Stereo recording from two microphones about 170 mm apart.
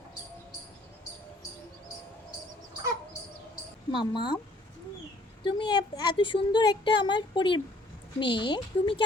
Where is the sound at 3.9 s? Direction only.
30° left (ahead or behind).